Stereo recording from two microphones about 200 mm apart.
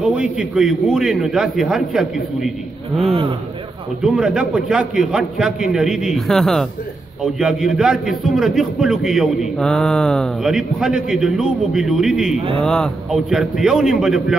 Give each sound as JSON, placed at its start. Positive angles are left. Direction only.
{"t": 0.0, "sound": "a man's voice", "side_deg": -5}
{"t": 3.1, "sound": "a man's voice", "side_deg": -30}
{"t": 4.0, "sound": "a man's voice", "side_deg": -5}